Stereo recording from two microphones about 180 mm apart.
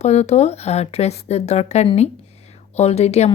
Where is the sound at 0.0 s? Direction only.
40° left (ahead or behind).